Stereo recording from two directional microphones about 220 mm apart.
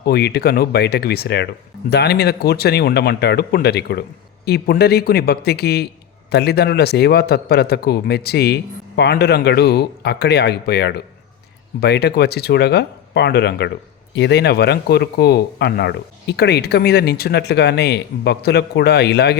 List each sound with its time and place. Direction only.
0.0 s speech: 45° left (ahead or behind)